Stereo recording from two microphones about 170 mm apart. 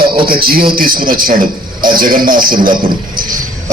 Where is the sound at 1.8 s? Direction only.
25° right (ahead or behind).